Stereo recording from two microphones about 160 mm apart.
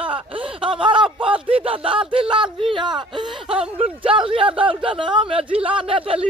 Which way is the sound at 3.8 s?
35° right (ahead or behind).